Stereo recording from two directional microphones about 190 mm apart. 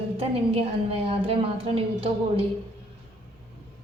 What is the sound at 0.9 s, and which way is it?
A woman's voice, 30° right (ahead or behind).